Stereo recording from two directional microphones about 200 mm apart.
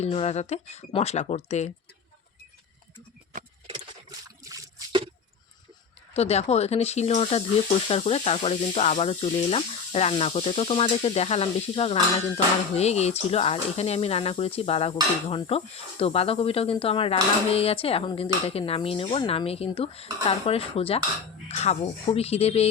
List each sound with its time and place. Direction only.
0.0 s speech: 30° left (ahead or behind)
4.4 s a sound: 15° right (ahead or behind)
6.1 s speech: 30° left (ahead or behind)